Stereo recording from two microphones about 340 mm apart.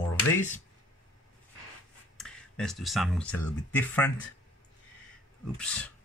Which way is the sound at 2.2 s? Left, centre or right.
Centre.